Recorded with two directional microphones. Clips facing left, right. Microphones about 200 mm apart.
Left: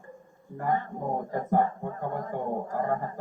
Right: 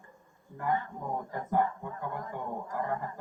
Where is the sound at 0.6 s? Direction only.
40° left (ahead or behind).